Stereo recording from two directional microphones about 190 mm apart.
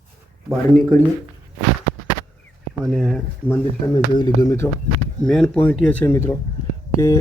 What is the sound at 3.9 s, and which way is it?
Speech, 20° left (ahead or behind).